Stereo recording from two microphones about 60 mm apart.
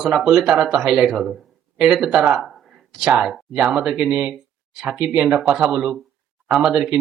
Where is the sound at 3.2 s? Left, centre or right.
Centre.